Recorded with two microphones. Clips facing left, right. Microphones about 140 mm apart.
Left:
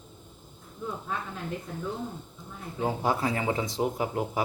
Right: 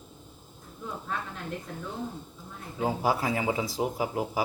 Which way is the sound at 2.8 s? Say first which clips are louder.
Even; 10° right (ahead or behind).